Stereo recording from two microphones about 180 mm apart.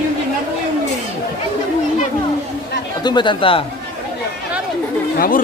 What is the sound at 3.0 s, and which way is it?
Speech, 25° left (ahead or behind).